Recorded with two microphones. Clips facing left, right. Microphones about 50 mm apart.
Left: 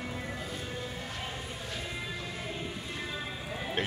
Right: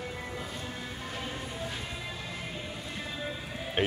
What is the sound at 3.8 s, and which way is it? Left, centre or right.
Speech, right.